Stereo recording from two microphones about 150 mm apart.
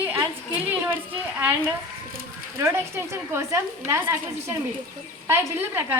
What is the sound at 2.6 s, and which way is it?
A woman's voice, 15° right (ahead or behind).